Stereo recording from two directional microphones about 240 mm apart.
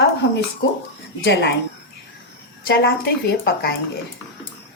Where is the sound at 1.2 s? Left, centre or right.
Left.